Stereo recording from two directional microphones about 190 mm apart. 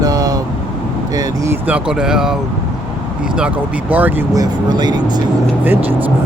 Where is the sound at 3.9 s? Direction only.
10° right (ahead or behind).